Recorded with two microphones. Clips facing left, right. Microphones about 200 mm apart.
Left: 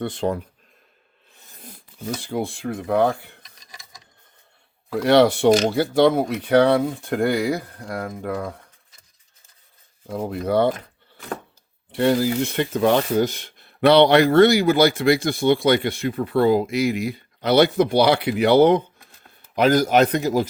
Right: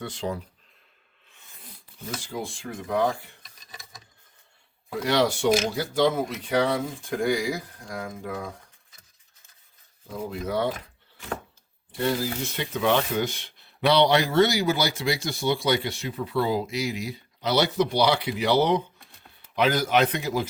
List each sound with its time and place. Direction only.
0.0 s speech: 60° left (ahead or behind)
1.3 s sneeze: 40° left (ahead or behind)
2.2 s speech: 60° left (ahead or behind)
5.0 s speech: 60° left (ahead or behind)
10.1 s speech: 60° left (ahead or behind)
11.9 s speech: 70° left (ahead or behind)
19.5 s speech: 45° left (ahead or behind)